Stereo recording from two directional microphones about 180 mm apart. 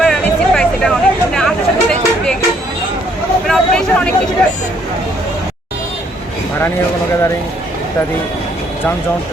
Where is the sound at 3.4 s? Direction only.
5° left (ahead or behind).